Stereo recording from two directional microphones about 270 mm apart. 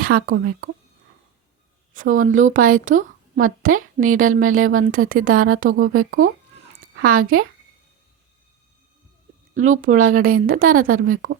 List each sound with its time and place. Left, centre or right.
0.0 s a woman's voice: right
1.9 s a woman's voice: right
9.8 s speech: right
11.0 s a woman's voice: right